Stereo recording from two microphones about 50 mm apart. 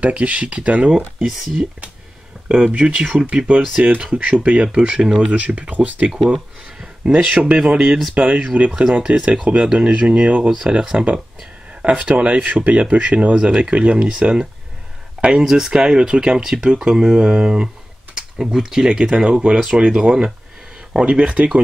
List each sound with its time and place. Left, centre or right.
0.0 s speech: right
0.9 s speech: centre
2.4 s speech: right
5.3 s speech: right
6.3 s a sound: right
7.2 s speech: right
8.1 s speech: right; by 11.1 s centre
11.8 s speech: right
15.1 s speech: right
15.4 s speech: centre